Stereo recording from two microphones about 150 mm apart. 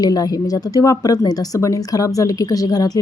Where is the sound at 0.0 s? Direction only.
25° left (ahead or behind).